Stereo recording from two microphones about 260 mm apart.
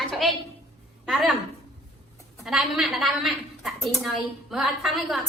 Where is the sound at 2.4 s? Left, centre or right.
Centre.